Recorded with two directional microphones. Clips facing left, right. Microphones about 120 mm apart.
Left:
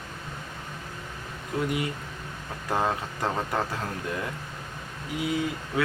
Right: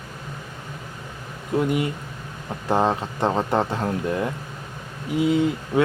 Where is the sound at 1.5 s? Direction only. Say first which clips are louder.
Right 6 dB; 25° right (ahead or behind).